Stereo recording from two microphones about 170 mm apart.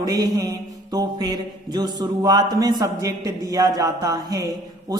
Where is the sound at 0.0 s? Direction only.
20° right (ahead or behind).